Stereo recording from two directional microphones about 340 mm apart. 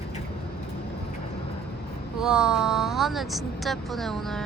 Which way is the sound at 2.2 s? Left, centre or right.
Centre.